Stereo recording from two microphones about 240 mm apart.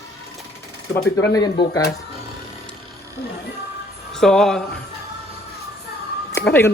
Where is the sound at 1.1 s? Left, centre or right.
Centre.